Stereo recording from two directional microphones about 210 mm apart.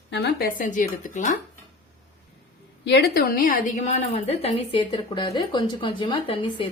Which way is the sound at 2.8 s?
50° left (ahead or behind).